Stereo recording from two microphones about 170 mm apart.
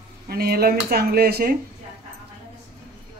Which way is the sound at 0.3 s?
65° right (ahead or behind).